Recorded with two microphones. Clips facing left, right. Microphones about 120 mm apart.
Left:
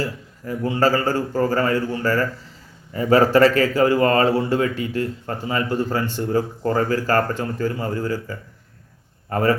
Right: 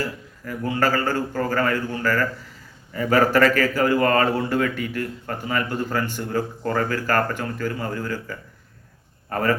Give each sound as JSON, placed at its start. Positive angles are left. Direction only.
{"t": 0.4, "sound": "a man's voice", "side_deg": 25}